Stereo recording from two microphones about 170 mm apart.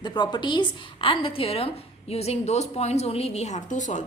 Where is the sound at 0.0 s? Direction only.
25° left (ahead or behind).